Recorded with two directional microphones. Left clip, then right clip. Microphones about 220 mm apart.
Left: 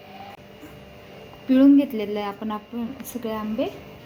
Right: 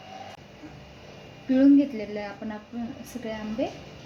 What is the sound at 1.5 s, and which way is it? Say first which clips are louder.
Speech: left 3 dB; 30° left (ahead or behind).